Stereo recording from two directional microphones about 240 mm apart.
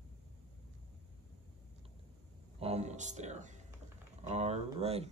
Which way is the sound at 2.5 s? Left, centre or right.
Right.